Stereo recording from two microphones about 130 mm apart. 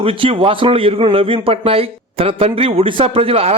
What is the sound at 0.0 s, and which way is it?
A man's voice, 45° right (ahead or behind).